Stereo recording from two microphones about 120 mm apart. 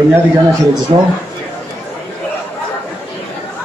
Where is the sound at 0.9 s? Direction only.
50° right (ahead or behind).